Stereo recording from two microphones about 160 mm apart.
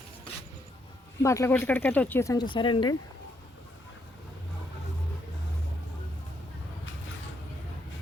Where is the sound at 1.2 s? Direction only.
20° left (ahead or behind).